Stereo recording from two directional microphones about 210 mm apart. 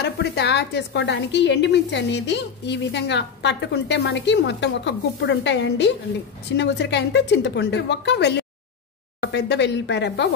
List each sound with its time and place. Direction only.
0.0 s a woman's voice: 50° left (ahead or behind)